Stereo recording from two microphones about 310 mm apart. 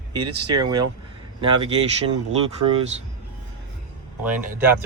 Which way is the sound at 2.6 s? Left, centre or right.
Right.